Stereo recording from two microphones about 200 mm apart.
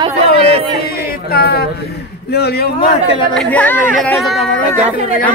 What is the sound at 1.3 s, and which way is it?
Speech, 50° left (ahead or behind).